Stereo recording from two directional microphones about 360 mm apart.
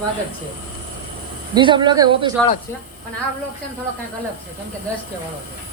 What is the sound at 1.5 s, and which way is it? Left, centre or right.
Speech, centre.